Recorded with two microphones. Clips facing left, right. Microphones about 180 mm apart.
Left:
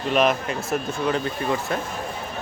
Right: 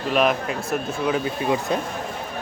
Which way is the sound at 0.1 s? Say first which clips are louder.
Even; centre (ahead or behind).